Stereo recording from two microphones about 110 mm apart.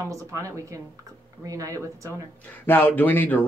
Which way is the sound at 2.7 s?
20° left (ahead or behind).